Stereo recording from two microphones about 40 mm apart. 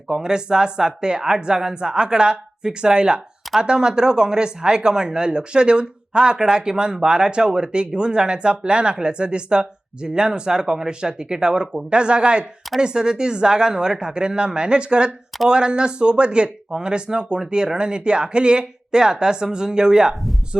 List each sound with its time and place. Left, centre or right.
0.1 s speech: centre